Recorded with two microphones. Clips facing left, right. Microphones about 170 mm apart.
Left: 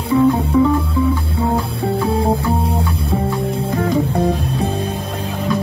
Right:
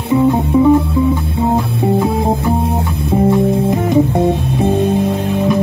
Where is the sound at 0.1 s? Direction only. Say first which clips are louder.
Right 2 dB; 20° right (ahead or behind).